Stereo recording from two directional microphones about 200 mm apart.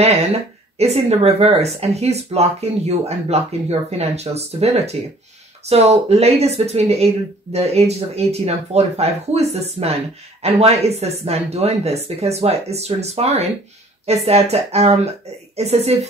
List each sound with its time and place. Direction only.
0.0 s speech: 30° right (ahead or behind)